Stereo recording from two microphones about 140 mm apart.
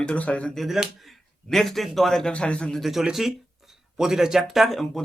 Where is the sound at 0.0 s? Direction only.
10° left (ahead or behind).